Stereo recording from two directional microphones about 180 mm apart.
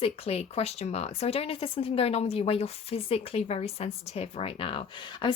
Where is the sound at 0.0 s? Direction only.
35° left (ahead or behind).